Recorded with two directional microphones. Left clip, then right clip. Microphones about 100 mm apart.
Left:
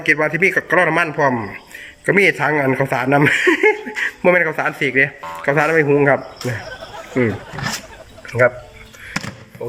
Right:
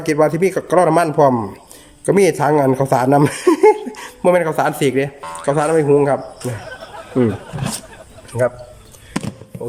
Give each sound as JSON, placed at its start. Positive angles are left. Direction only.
{"t": 0.0, "sound": "a man's voice", "side_deg": -30}
{"t": 3.8, "sound": "a man's voice", "side_deg": -20}
{"t": 5.2, "sound": "music", "side_deg": 0}
{"t": 5.5, "sound": "a man's voice", "side_deg": -25}
{"t": 6.1, "sound": "speech", "side_deg": -5}
{"t": 8.4, "sound": "speech", "side_deg": 15}
{"t": 9.6, "sound": "speech", "side_deg": -15}